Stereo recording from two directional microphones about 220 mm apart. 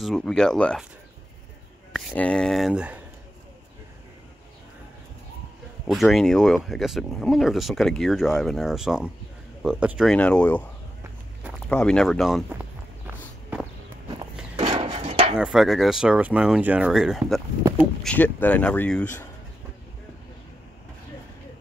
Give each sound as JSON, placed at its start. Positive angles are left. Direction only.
{"t": 0.0, "sound": "speech", "side_deg": 0}
{"t": 2.0, "sound": "speech", "side_deg": 5}
{"t": 5.9, "sound": "speech", "side_deg": 0}
{"t": 11.7, "sound": "speech", "side_deg": 5}
{"t": 14.6, "sound": "a sound", "side_deg": -25}
{"t": 15.3, "sound": "speech", "side_deg": -5}